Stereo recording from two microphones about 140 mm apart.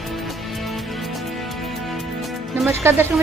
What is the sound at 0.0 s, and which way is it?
Music, centre (ahead or behind).